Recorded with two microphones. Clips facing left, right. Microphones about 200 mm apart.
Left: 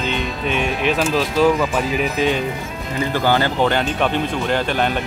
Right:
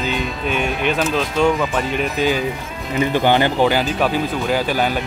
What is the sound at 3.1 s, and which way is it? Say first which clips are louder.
Speech: right 2 dB; 20° right (ahead or behind).